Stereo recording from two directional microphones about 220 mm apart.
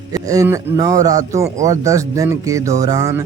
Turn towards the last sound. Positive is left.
turn(degrees=-15)  # may be behind; listen again after turning